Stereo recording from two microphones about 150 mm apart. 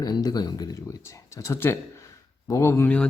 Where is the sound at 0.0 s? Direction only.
25° left (ahead or behind).